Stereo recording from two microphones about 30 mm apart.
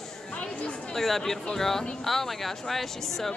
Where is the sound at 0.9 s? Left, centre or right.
Centre.